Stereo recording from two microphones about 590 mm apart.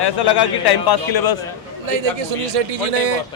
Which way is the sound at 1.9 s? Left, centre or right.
Right.